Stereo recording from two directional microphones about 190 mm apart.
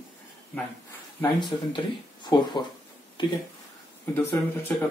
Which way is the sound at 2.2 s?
20° left (ahead or behind).